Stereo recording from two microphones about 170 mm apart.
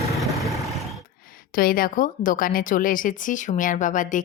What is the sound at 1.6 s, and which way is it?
A woman's voice, 55° left (ahead or behind).